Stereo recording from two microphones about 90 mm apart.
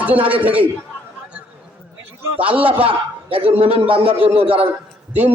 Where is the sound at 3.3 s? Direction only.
90° right.